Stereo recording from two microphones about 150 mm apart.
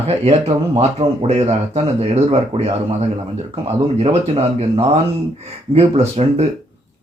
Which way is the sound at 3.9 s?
40° right (ahead or behind).